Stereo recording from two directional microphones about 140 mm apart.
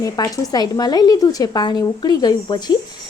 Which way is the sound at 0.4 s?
30° left (ahead or behind).